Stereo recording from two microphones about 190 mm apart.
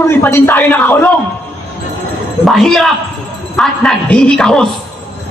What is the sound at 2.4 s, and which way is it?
Speech, centre (ahead or behind).